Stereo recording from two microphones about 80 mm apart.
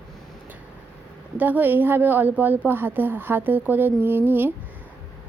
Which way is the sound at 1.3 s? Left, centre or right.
Right.